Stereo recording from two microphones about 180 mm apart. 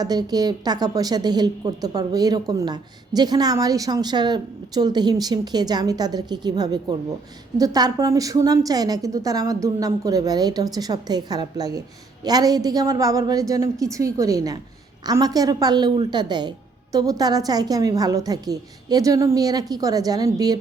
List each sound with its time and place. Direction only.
0.0 s a woman's voice: 20° right (ahead or behind)